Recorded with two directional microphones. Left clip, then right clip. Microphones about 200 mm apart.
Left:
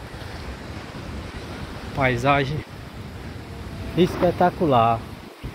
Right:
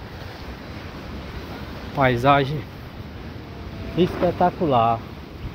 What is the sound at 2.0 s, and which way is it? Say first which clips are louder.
Speech: right 3 dB; 15° right (ahead or behind).